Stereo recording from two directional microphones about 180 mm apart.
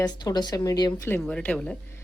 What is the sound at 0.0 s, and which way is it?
Speech, 20° left (ahead or behind).